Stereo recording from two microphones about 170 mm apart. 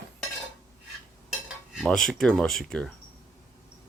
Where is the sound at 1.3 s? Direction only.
5° right (ahead or behind).